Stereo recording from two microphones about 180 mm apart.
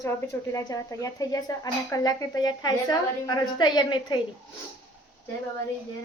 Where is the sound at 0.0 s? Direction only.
15° left (ahead or behind).